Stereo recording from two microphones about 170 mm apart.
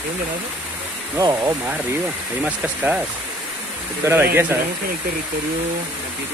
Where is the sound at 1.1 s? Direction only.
20° right (ahead or behind).